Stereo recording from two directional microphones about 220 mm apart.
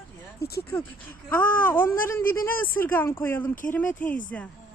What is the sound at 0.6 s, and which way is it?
Speech, 10° left (ahead or behind).